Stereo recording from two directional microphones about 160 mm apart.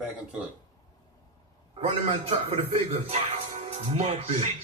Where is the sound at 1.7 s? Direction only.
35° right (ahead or behind).